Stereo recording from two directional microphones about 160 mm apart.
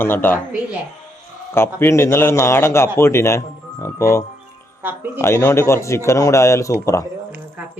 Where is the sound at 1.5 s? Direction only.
15° left (ahead or behind).